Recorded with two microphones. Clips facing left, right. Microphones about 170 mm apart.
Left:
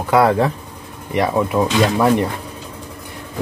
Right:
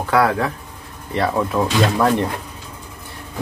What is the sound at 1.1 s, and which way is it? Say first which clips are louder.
Speech: left 2 dB; 15° left (ahead or behind).